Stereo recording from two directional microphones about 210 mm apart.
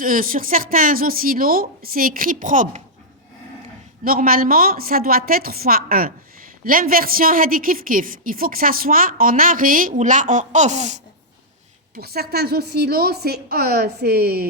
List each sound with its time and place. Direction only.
0.0 s a woman's voice: 40° right (ahead or behind)
4.0 s a woman's voice: 45° right (ahead or behind)
11.9 s a woman's voice: 45° right (ahead or behind)